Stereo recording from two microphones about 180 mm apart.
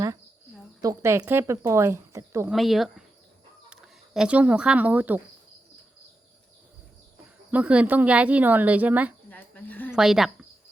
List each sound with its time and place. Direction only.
0.8 s speech: 15° right (ahead or behind)
2.5 s speech: centre (ahead or behind)
7.5 s speech: 5° right (ahead or behind)
9.3 s a sound: 10° left (ahead or behind)
9.9 s speech: centre (ahead or behind)